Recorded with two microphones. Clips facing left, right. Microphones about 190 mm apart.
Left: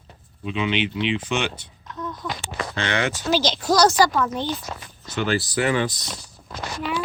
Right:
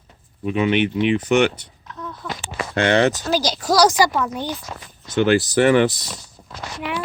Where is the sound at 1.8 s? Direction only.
Centre (ahead or behind).